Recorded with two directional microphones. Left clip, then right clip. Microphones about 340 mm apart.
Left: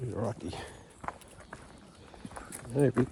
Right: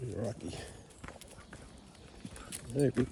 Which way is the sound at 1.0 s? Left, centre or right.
Centre.